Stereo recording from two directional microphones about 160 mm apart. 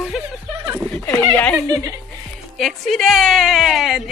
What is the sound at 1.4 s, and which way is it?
Speech, 10° left (ahead or behind).